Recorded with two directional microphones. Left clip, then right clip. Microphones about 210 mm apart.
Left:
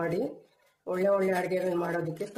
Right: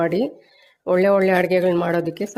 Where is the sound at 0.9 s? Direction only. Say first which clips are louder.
Right 10 dB; 40° right (ahead or behind).